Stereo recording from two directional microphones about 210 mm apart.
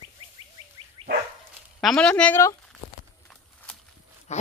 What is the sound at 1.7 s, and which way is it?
Speech, 5° left (ahead or behind).